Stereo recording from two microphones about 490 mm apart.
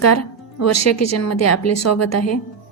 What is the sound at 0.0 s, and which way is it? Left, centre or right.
A woman's voice, left.